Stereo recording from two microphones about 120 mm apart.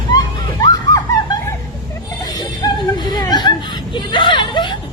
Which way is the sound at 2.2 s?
35° left (ahead or behind).